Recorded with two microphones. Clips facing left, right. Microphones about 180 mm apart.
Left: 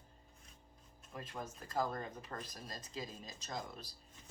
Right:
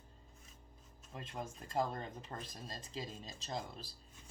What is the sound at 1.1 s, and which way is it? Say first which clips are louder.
Speech: right 1 dB; 25° right (ahead or behind).